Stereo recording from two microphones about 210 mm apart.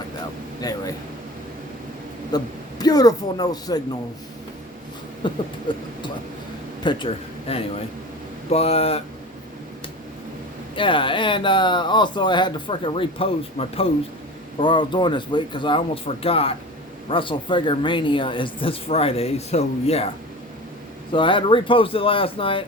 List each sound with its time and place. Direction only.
0.6 s speech: 15° left (ahead or behind)
2.3 s speech: 20° left (ahead or behind)
5.2 s a man's voice: 20° left (ahead or behind)
10.8 s speech: 25° left (ahead or behind)
21.1 s speech: 25° left (ahead or behind)